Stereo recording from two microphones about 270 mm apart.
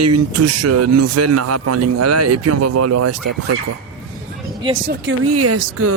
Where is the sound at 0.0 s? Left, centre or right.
Right.